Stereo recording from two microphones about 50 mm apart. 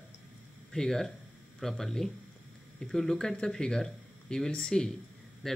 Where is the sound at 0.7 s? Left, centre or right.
Centre.